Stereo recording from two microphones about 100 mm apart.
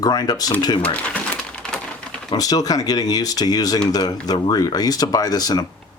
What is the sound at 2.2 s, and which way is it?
Speech, 40° left (ahead or behind).